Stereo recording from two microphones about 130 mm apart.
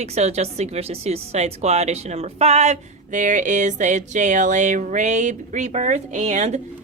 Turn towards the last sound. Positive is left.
turn(degrees=-60)  # may be behind; listen again after turning